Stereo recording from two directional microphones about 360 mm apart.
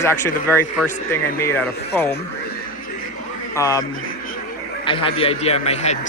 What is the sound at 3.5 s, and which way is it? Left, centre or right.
A man's voice, centre.